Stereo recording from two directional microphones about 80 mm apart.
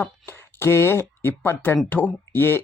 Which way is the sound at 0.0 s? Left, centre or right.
Left.